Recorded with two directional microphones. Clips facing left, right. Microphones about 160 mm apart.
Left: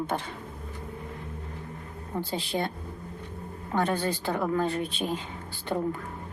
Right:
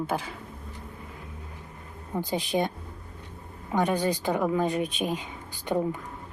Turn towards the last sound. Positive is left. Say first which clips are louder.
# right 1 dB
turn(degrees=-15)  # may be behind; listen again after turning